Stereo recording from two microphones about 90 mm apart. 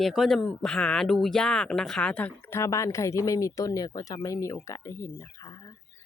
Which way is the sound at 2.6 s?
35° left (ahead or behind).